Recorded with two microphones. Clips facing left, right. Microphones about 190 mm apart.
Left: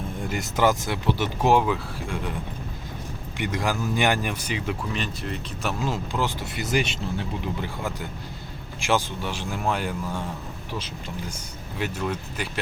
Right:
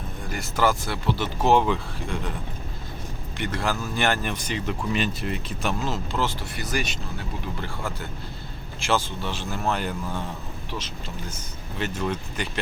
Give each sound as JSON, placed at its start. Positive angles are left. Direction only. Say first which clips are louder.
{"t": 0.3, "sound": "speech", "louder": "left 1 dB", "side_deg": 20}
{"t": 3.3, "sound": "speech", "louder": "left 1 dB", "side_deg": 15}
{"t": 4.9, "sound": "speech", "louder": "right 3 dB", "side_deg": 0}
{"t": 5.8, "sound": "speech", "louder": "even", "side_deg": 15}
{"t": 7.6, "sound": "speech", "louder": "left 2 dB", "side_deg": 15}
{"t": 11.8, "sound": "speech", "louder": "even", "side_deg": 10}